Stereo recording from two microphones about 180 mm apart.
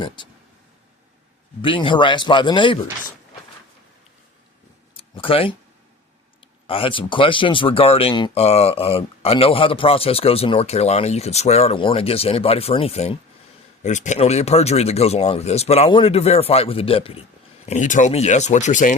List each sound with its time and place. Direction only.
1.6 s speech: 30° left (ahead or behind)
4.9 s a sound: 30° left (ahead or behind)
6.4 s speech: 30° left (ahead or behind)
17.7 s speech: 45° left (ahead or behind)